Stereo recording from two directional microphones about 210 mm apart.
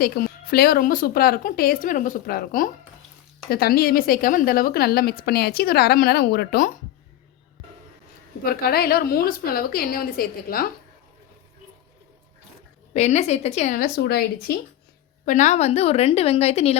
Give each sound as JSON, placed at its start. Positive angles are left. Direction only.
{"t": 0.0, "sound": "a woman's voice", "side_deg": 45}
{"t": 8.4, "sound": "a woman's voice", "side_deg": 45}
{"t": 12.9, "sound": "a woman's voice", "side_deg": 30}